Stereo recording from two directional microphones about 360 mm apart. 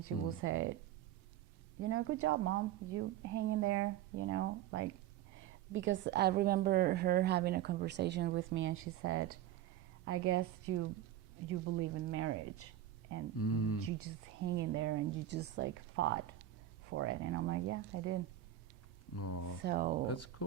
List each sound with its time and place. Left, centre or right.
0.0 s a woman's voice: right
1.8 s a woman's voice: right
13.4 s speech: left
14.0 s a woman's voice: right
19.1 s speech: left
19.6 s a woman's voice: right
20.1 s speech: left